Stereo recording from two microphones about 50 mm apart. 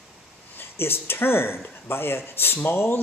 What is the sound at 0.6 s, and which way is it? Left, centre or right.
Speech, left.